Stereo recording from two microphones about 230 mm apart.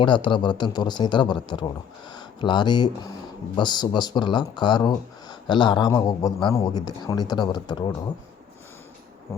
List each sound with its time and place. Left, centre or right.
0.0 s speech: left